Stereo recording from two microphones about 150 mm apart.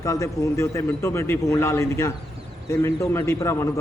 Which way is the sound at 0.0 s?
20° left (ahead or behind).